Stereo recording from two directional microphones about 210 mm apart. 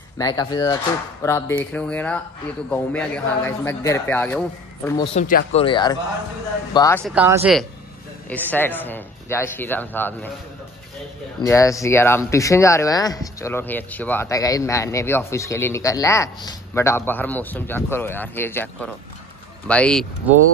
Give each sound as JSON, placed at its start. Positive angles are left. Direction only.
{"t": 0.2, "sound": "speech", "side_deg": 20}
{"t": 4.8, "sound": "speech", "side_deg": 20}
{"t": 5.1, "sound": "speech", "side_deg": 35}
{"t": 5.6, "sound": "speech", "side_deg": 20}
{"t": 7.1, "sound": "speech", "side_deg": -10}
{"t": 8.3, "sound": "speech", "side_deg": 10}
{"t": 11.4, "sound": "speech", "side_deg": 15}